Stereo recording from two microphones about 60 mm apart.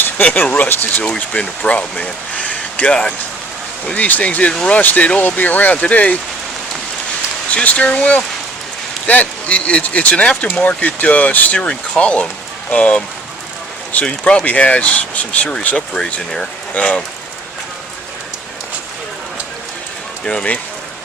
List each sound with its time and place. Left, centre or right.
0.3 s speech: left
1.0 s speech: centre
7.5 s speech: left
14.0 s speech: centre
20.2 s speech: centre